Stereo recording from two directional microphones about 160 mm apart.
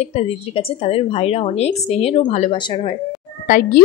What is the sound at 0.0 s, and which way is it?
Speech, 40° left (ahead or behind).